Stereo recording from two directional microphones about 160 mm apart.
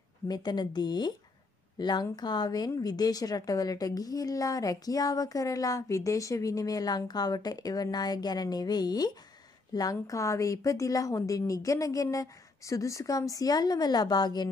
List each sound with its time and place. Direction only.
0.3 s a woman's voice: 25° left (ahead or behind)